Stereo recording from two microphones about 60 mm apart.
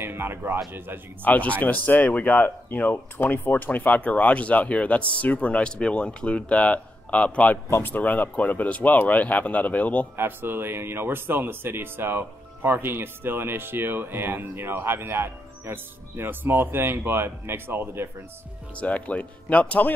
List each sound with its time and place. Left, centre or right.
0.0 s speech: right
1.2 s speech: left
10.1 s speech: right
18.8 s speech: left